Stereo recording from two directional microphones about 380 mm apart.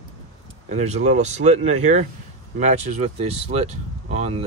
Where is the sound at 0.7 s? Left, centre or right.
Centre.